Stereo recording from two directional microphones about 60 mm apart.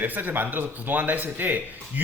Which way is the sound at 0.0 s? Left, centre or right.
Right.